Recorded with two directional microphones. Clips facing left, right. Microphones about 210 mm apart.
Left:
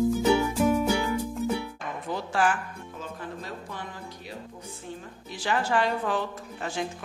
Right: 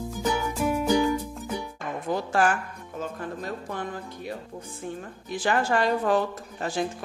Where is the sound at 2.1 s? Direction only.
45° right (ahead or behind).